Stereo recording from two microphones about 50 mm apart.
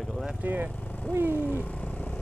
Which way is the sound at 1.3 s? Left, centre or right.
Left.